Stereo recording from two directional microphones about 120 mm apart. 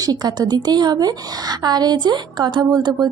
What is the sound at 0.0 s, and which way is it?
A woman's voice, 35° right (ahead or behind).